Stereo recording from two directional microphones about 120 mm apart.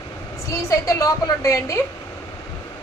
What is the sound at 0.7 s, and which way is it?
A woman's voice, 25° left (ahead or behind).